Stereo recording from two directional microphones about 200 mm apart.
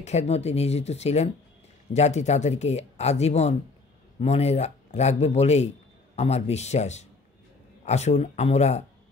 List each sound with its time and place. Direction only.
0.0 s speech: 35° left (ahead or behind)